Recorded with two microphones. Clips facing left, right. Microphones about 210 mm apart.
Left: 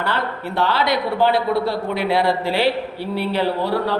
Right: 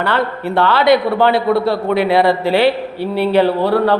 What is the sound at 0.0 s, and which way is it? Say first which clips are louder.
A man's voice: right 6 dB; 65° right (ahead or behind).